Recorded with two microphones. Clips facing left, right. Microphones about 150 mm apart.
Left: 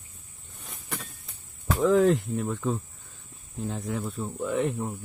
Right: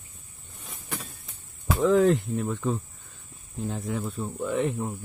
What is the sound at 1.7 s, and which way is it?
Speech, centre (ahead or behind).